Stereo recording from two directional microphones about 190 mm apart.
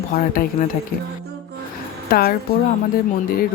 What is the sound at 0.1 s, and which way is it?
Speech, 45° left (ahead or behind).